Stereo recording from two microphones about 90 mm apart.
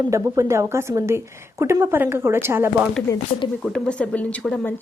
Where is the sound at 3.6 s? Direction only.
10° left (ahead or behind).